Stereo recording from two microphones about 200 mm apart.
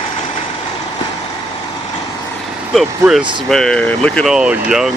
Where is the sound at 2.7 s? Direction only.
Centre (ahead or behind).